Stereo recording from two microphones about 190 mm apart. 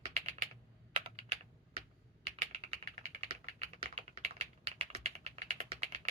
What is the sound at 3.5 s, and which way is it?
Typing, 30° right (ahead or behind).